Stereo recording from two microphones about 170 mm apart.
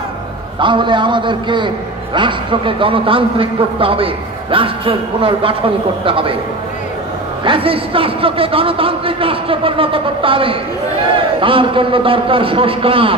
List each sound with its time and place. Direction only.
0.6 s a man's voice: 30° right (ahead or behind)
7.4 s a man's voice: 35° right (ahead or behind)